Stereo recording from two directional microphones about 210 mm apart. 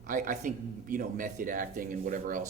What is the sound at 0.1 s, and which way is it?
Speech, 40° right (ahead or behind).